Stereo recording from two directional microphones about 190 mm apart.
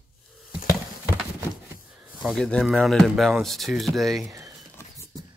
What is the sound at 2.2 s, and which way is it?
Speech, centre (ahead or behind).